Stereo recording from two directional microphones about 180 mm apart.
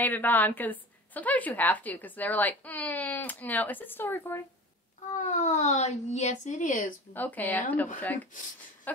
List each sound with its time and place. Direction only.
0.0 s a woman's voice: 10° left (ahead or behind)
5.1 s speech: 45° left (ahead or behind)
7.2 s a woman's voice: 10° left (ahead or behind)
8.9 s a sound: 10° left (ahead or behind)